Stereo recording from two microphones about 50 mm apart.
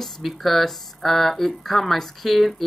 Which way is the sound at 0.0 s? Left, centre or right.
Centre.